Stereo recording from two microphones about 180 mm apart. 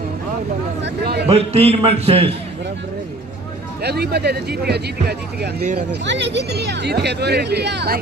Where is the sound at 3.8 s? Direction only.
65° right (ahead or behind).